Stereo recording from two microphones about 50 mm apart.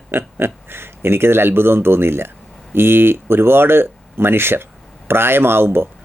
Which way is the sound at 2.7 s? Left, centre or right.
Right.